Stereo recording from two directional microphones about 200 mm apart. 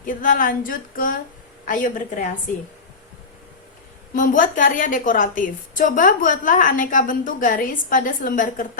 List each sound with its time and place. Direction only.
0.0 s a woman's voice: 45° left (ahead or behind)
4.1 s a woman's voice: 40° left (ahead or behind)